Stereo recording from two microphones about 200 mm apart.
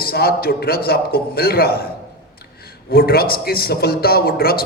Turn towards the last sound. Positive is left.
turn(degrees=50)  # may be behind; listen again after turning